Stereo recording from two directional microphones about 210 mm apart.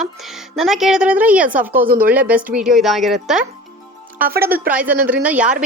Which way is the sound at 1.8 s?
45° right (ahead or behind).